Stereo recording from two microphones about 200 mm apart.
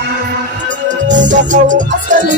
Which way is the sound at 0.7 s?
40° right (ahead or behind).